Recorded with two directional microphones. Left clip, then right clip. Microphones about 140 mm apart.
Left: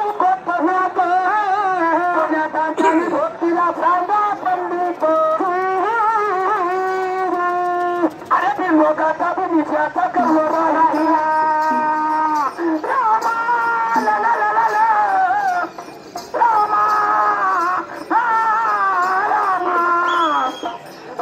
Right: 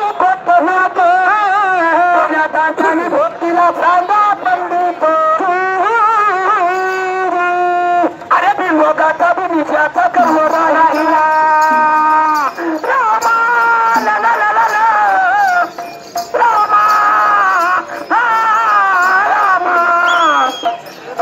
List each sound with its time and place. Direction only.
0.2 s music: 25° right (ahead or behind)
3.4 s a sound: 25° right (ahead or behind)
5.0 s music: 25° right (ahead or behind)
7.3 s a sound: 25° right (ahead or behind)
12.9 s music: 30° right (ahead or behind)
16.3 s music: 30° right (ahead or behind)